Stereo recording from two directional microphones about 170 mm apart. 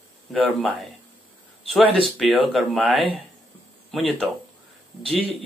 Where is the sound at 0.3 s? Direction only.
Centre (ahead or behind).